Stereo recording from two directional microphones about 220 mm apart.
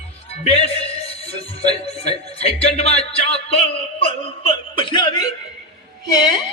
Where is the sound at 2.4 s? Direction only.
30° left (ahead or behind).